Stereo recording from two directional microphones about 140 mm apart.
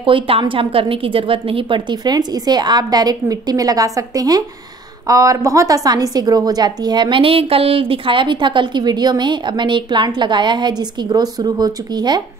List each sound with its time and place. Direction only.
0.0 s a woman's voice: 40° right (ahead or behind)